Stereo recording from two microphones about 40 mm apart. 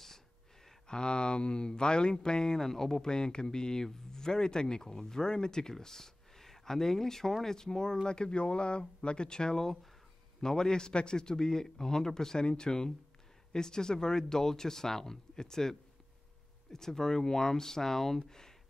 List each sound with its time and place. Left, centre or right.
0.8 s speech: left
16.7 s speech: centre